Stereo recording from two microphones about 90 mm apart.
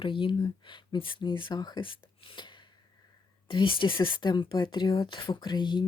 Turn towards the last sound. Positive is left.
turn(degrees=55)  # may be behind; listen again after turning